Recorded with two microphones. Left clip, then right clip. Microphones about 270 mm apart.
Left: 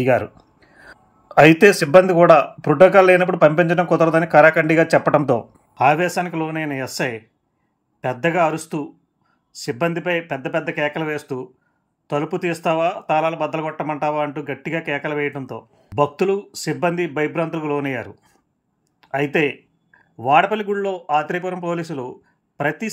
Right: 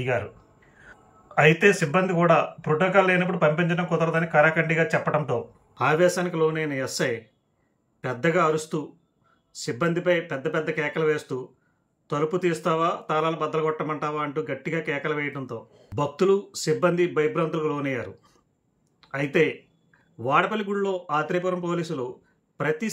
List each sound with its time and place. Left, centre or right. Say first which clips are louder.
0.0 s a sound: left 9 dB; left
1.4 s speech: left 7 dB; centre
8.1 s speech: left 4 dB; centre